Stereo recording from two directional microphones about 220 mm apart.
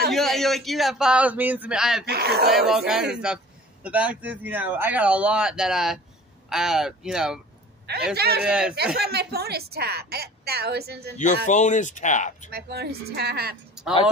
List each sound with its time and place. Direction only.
0.1 s speech: centre (ahead or behind)
2.0 s a woman's voice: 45° right (ahead or behind)
2.5 s speech: centre (ahead or behind)
8.2 s a woman's voice: 45° right (ahead or behind)
8.5 s speech: 5° right (ahead or behind)
8.9 s a woman's voice: 45° right (ahead or behind)
11.4 s speech: 35° left (ahead or behind)
12.4 s a woman's voice: 45° right (ahead or behind)